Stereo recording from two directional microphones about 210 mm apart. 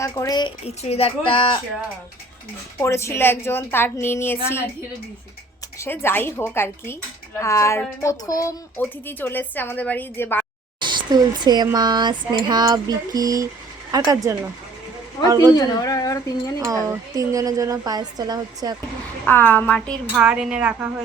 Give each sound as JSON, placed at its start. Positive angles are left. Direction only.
{"t": 0.0, "sound": "speech", "side_deg": 15}
{"t": 2.8, "sound": "speech", "side_deg": 15}
{"t": 5.8, "sound": "speech", "side_deg": 10}
{"t": 10.8, "sound": "a woman's voice", "side_deg": -20}
{"t": 15.5, "sound": "speech", "side_deg": 20}
{"t": 16.6, "sound": "a woman's voice", "side_deg": -15}
{"t": 19.2, "sound": "a woman's voice", "side_deg": 10}